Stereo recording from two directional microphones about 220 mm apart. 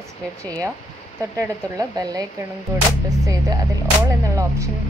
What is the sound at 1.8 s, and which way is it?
Speech, 15° right (ahead or behind).